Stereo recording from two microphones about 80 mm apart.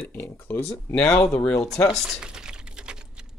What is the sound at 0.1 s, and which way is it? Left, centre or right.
Speech, left.